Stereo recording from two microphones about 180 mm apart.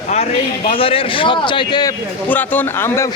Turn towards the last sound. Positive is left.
turn(degrees=15)  # may be behind; listen again after turning